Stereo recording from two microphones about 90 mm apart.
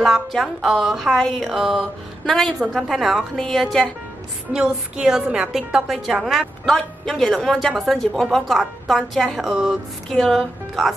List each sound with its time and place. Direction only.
0.0 s a woman's voice: centre (ahead or behind)
4.5 s a woman's voice: 10° right (ahead or behind)